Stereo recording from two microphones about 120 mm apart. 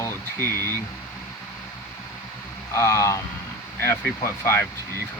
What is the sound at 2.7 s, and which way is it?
Speech, 25° left (ahead or behind).